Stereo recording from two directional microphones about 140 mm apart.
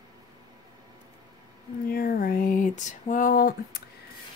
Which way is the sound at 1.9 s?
90° left.